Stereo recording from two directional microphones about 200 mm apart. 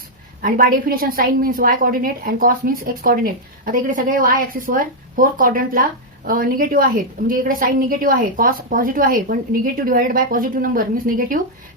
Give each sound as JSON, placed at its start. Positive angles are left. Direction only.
{"t": 0.4, "sound": "a woman's voice", "side_deg": -45}